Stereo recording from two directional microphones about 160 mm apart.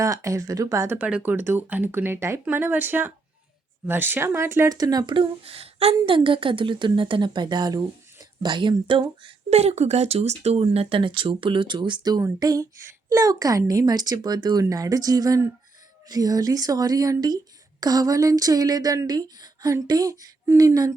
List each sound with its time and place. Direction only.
0.0 s speech: 20° right (ahead or behind)